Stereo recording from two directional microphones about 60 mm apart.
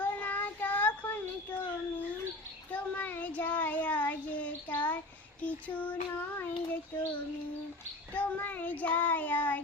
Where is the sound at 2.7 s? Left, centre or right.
Left.